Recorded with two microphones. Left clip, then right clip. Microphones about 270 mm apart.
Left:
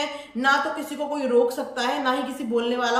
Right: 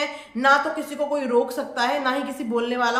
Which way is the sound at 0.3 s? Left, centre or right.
Centre.